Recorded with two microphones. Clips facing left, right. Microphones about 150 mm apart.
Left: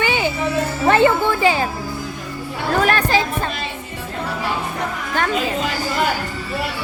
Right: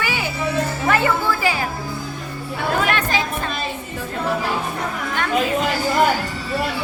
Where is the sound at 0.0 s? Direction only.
25° left (ahead or behind).